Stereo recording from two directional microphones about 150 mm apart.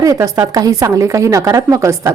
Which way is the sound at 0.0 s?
20° right (ahead or behind).